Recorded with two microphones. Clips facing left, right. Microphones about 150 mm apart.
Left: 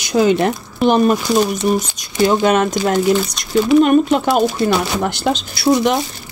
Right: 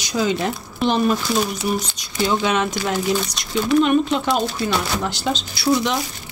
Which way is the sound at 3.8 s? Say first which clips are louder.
Left 5 dB; 50° left (ahead or behind).